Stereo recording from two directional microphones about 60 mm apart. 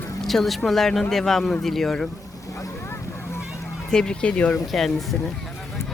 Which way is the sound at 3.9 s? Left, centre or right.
Centre.